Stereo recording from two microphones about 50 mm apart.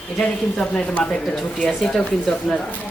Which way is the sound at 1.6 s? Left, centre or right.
Centre.